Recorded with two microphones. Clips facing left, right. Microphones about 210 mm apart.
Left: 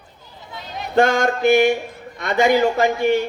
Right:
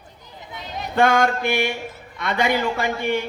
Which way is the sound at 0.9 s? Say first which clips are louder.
Left 2 dB; 45° left (ahead or behind).